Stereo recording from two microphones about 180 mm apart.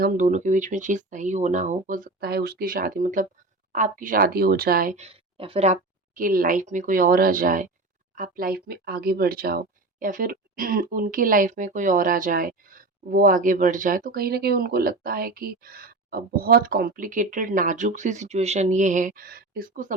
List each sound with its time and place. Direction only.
0.0 s speech: 45° right (ahead or behind)
4.9 s speech: 35° right (ahead or behind)